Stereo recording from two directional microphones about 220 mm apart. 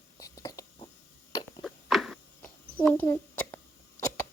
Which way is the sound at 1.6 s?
Centre (ahead or behind).